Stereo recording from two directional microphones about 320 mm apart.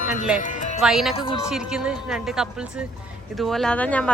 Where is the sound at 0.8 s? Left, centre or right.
Centre.